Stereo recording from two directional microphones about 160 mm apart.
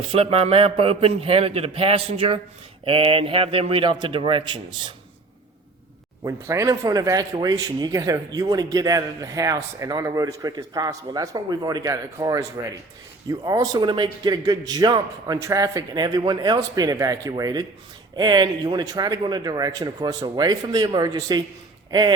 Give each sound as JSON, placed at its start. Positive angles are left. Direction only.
{"t": 0.1, "sound": "a man's voice", "side_deg": -35}
{"t": 6.2, "sound": "speech", "side_deg": -20}